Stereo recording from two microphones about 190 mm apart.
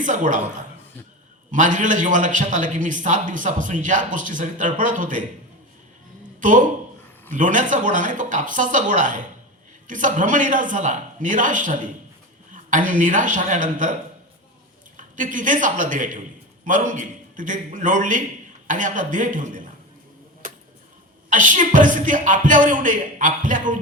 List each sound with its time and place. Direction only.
0.0 s a man's voice: 40° right (ahead or behind)
6.4 s a man's voice: 45° right (ahead or behind)
14.9 s a man's voice: 45° right (ahead or behind)
20.4 s a sound: 45° right (ahead or behind)
21.2 s a man's voice: 45° right (ahead or behind)